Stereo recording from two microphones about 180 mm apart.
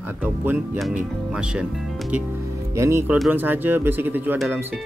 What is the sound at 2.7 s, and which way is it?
Speech, 15° right (ahead or behind).